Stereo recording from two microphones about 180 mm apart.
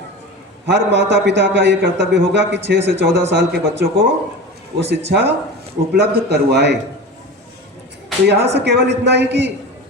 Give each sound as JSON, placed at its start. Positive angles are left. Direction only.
{"t": 0.7, "sound": "a man's voice", "side_deg": -75}
{"t": 5.9, "sound": "a man's voice", "side_deg": -60}
{"t": 8.3, "sound": "a man's voice", "side_deg": -70}